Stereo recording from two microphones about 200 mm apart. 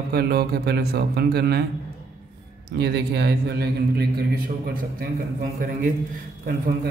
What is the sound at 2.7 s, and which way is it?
A man's voice, 55° right (ahead or behind).